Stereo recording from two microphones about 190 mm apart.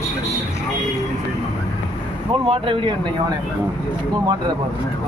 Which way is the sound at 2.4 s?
30° right (ahead or behind).